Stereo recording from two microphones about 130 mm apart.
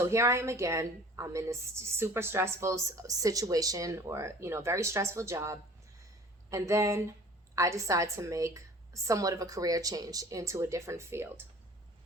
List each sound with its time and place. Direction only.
0.0 s a woman's voice: 20° right (ahead or behind)